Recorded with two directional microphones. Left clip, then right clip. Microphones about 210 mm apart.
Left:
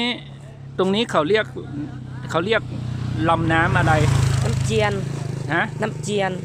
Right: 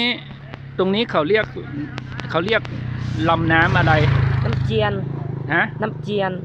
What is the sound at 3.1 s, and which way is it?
Speech, centre (ahead or behind).